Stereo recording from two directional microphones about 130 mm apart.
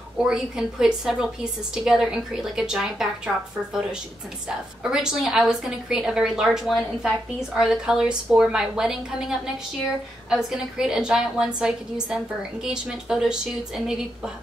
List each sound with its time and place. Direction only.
0.2 s a woman's voice: 5° right (ahead or behind)
4.8 s a woman's voice: 5° right (ahead or behind)